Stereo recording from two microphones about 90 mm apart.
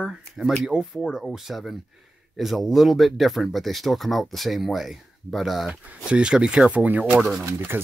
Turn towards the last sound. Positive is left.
turn(degrees=-25)  # may be behind; listen again after turning